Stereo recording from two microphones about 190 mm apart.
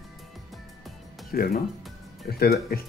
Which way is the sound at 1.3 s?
50° left (ahead or behind).